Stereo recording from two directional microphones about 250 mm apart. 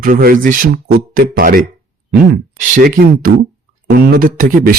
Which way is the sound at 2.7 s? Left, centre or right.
Right.